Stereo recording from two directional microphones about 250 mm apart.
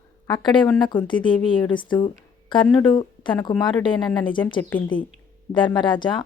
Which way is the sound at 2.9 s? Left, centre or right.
Centre.